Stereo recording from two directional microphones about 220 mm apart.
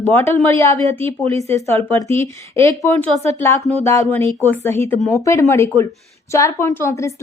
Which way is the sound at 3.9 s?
10° left (ahead or behind).